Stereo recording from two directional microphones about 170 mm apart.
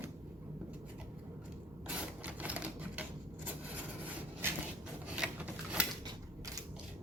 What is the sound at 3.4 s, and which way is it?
Wood, 10° right (ahead or behind).